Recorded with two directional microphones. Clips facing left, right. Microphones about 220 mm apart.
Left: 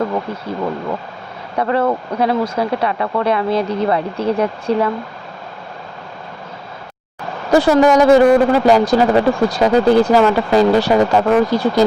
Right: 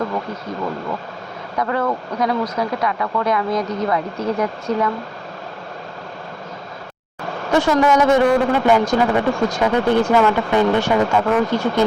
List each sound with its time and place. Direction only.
1.5 s speech: 30° left (ahead or behind)
7.5 s speech: 35° left (ahead or behind)